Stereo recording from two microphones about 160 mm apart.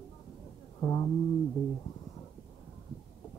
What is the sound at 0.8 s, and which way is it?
Speech, 25° left (ahead or behind).